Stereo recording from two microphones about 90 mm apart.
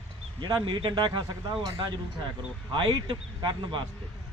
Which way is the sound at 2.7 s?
65° right (ahead or behind).